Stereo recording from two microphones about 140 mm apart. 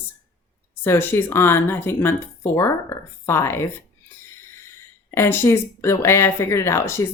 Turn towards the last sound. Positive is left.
turn(degrees=20)  # may be behind; listen again after turning